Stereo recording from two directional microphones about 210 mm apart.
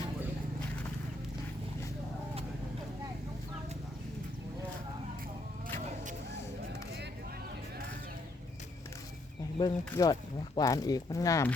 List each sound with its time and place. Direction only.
9.6 s speech: 20° left (ahead or behind)